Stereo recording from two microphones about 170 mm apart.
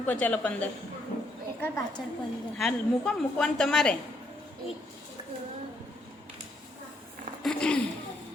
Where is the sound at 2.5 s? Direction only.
5° left (ahead or behind).